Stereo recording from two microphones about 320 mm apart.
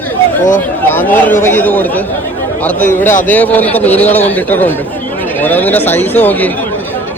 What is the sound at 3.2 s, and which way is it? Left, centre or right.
A man's voice, centre.